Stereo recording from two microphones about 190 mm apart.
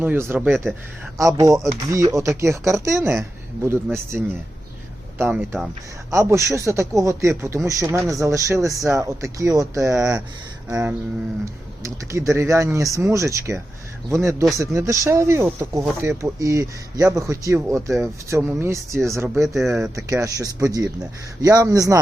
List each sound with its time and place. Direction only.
0.0 s speech: 10° right (ahead or behind)
19.5 s speech: centre (ahead or behind)
20.1 s speech: 15° right (ahead or behind)